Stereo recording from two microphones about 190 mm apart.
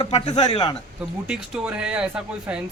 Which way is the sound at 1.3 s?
5° right (ahead or behind).